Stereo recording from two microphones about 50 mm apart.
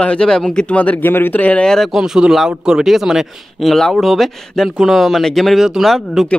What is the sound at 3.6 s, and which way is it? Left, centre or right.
Speech, centre.